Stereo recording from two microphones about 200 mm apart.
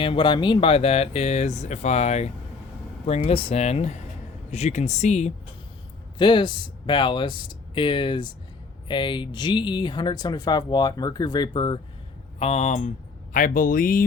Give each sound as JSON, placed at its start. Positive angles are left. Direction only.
{"t": 0.0, "sound": "speech", "side_deg": 25}
{"t": 6.1, "sound": "speech", "side_deg": 25}